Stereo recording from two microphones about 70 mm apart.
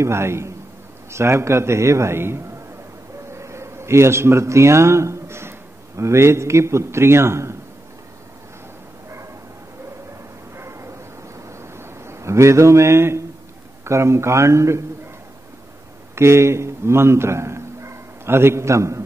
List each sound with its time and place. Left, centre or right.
0.0 s a man's voice: right
10.5 s bow-wow: right
11.3 s a sound: right
13.8 s speech: right
16.2 s a man's voice: right